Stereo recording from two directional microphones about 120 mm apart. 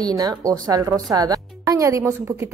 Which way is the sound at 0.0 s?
30° right (ahead or behind).